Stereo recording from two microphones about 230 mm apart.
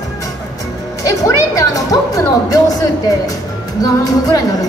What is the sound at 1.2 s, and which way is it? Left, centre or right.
Music, centre.